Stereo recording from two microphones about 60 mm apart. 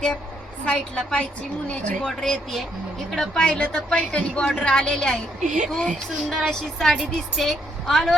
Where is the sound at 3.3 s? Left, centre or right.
Centre.